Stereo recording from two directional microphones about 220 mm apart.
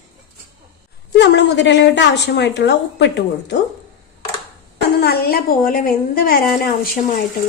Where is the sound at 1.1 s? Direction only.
50° left (ahead or behind).